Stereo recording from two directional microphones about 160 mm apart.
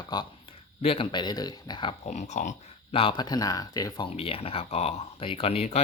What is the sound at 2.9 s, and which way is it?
Speech, 35° left (ahead or behind).